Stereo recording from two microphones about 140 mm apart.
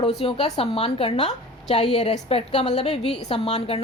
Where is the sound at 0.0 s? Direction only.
45° left (ahead or behind).